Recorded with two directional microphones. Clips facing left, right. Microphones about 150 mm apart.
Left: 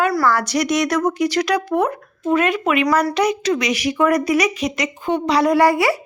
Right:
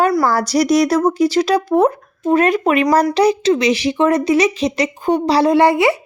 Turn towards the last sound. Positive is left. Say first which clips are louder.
# right 3 dB
turn(degrees=-20)  # may be behind; listen again after turning